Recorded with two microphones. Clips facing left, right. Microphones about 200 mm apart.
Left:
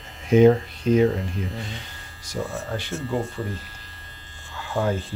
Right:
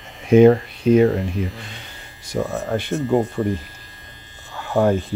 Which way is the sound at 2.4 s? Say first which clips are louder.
Right 6 dB; 45° right (ahead or behind).